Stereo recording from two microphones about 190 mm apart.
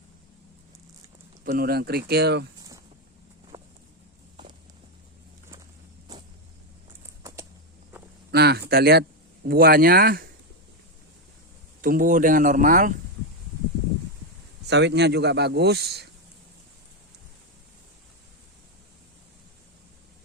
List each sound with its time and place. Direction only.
1.5 s speech: 55° right (ahead or behind)
3.5 s a sound: 15° right (ahead or behind)
7.2 s typing: 15° right (ahead or behind)
8.3 s a sound: 60° right (ahead or behind)
8.7 s speech: 55° right (ahead or behind)
11.8 s speech: 45° right (ahead or behind)
14.7 s speech: 65° right (ahead or behind)